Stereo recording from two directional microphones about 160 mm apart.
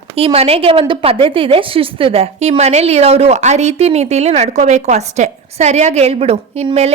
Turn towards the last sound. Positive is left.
turn(degrees=-40)  # may be behind; listen again after turning